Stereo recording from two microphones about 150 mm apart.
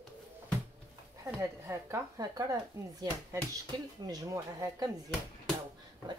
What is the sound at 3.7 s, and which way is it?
Speech, 30° right (ahead or behind).